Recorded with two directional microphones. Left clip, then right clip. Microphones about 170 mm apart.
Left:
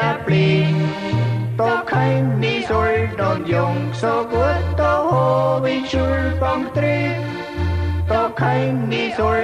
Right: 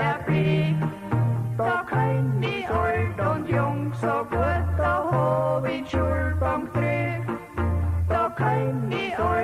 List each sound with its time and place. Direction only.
0.0 s music: 40° right (ahead or behind)
8.1 s music: 40° right (ahead or behind)